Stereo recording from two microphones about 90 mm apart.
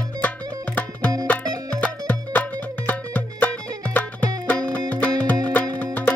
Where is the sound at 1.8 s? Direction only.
20° left (ahead or behind).